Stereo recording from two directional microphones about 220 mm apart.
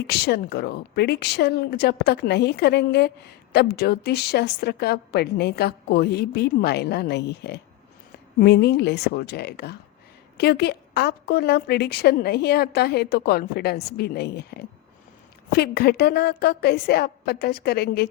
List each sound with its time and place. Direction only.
0.1 s a woman's voice: 45° left (ahead or behind)